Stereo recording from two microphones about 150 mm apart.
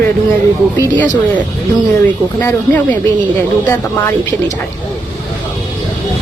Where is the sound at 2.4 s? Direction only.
15° left (ahead or behind).